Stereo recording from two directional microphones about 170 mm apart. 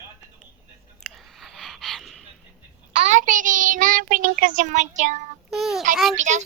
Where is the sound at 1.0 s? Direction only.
Centre (ahead or behind).